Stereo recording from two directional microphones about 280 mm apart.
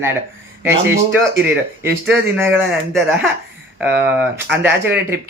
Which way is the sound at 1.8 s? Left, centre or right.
Centre.